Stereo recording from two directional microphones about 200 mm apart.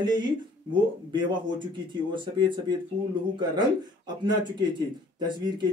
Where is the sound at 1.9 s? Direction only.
20° right (ahead or behind).